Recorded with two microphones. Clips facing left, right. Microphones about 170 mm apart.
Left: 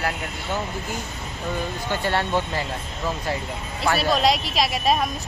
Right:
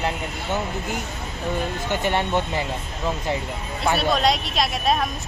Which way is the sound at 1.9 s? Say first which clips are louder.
Right 1 dB; 20° right (ahead or behind).